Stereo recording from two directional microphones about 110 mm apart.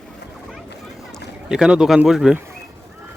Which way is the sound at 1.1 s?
5° right (ahead or behind).